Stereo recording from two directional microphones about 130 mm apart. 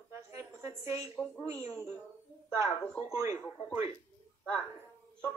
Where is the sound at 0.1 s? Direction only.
20° right (ahead or behind).